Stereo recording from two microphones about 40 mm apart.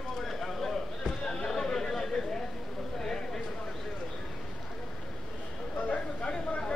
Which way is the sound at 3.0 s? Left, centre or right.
Centre.